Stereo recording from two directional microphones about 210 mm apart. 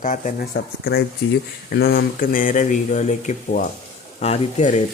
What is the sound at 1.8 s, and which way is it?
Speech, 45° left (ahead or behind).